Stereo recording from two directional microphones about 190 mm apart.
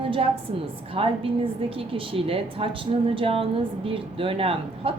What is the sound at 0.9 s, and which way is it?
Speech, 30° right (ahead or behind).